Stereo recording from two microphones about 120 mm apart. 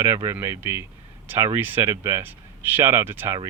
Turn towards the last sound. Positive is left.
turn(degrees=-20)  # may be behind; listen again after turning